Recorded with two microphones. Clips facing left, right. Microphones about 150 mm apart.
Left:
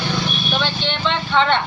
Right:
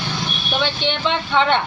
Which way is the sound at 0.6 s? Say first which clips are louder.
Right 1 dB; 15° right (ahead or behind).